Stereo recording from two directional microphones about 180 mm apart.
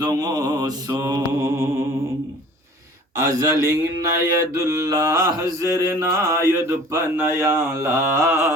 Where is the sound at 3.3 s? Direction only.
15° right (ahead or behind).